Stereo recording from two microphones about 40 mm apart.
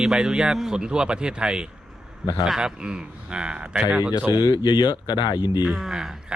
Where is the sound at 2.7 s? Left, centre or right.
Right.